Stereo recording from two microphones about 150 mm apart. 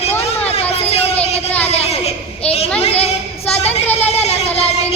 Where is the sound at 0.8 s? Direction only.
45° left (ahead or behind).